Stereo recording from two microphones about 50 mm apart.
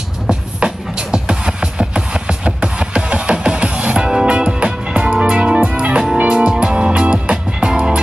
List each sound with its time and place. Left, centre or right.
0.3 s music: centre